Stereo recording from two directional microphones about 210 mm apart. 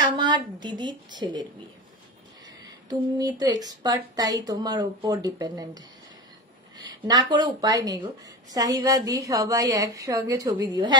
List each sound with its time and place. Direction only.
0.0 s speech: 20° right (ahead or behind)
2.9 s a woman's voice: 20° right (ahead or behind)